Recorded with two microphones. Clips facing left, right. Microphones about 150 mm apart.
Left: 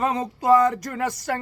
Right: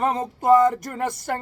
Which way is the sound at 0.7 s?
50° right (ahead or behind).